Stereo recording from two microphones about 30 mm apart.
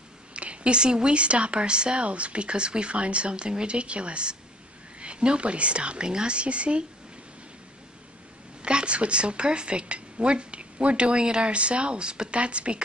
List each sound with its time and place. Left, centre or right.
0.3 s speech: right
2.0 s a woman's voice: right
8.6 s a woman's voice: right